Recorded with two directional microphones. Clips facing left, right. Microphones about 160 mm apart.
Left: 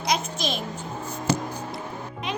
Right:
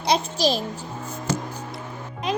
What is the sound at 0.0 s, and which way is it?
Speech, 35° right (ahead or behind).